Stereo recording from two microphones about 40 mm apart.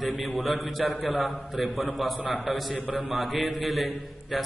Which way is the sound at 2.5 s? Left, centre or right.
Centre.